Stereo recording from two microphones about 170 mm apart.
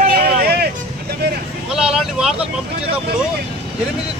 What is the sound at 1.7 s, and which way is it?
Speech, 5° right (ahead or behind).